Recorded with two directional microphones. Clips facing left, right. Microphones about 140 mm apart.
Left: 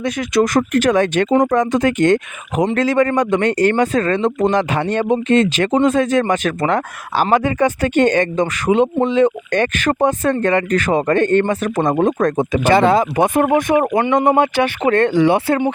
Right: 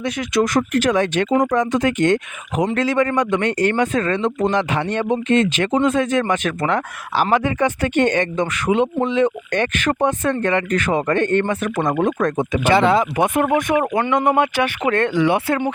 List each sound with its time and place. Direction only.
0.0 s speech: 45° left (ahead or behind)